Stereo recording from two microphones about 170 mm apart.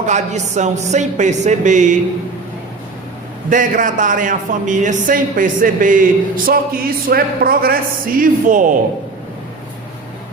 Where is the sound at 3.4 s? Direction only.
50° right (ahead or behind).